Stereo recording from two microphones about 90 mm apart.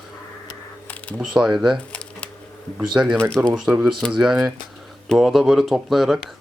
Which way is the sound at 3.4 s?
20° right (ahead or behind).